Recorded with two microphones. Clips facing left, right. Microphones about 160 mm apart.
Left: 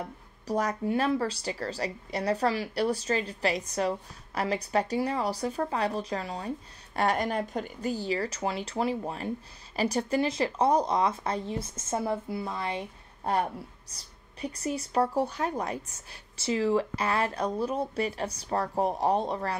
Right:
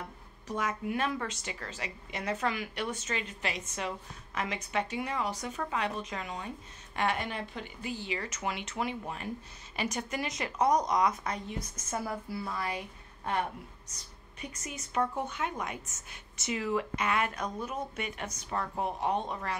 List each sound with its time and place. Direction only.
0.5 s a woman's voice: 40° left (ahead or behind)